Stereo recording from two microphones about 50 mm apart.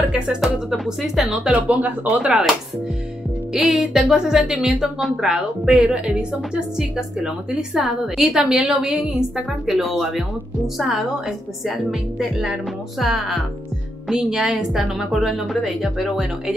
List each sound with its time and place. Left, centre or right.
0.4 s a woman's voice: centre
1.7 s speech: right
3.5 s a woman's voice: centre